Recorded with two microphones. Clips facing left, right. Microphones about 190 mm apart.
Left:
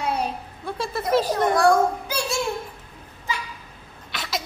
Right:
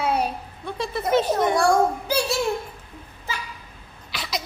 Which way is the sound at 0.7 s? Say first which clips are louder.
Even; centre (ahead or behind).